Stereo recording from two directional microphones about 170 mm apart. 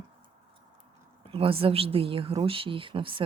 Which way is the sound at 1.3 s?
35° right (ahead or behind).